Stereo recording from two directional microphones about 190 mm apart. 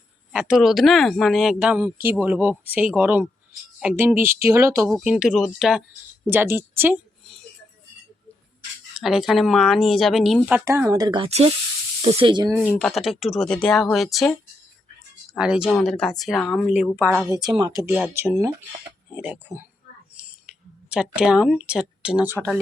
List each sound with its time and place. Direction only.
0.3 s speech: 5° right (ahead or behind)
4.9 s speech: centre (ahead or behind)
9.0 s speech: centre (ahead or behind); by 12.5 s 20° right (ahead or behind)
12.5 s speech: centre (ahead or behind)
16.6 s speech: 5° right (ahead or behind)
17.2 s speech: 15° right (ahead or behind)
20.1 s a sound: 5° right (ahead or behind)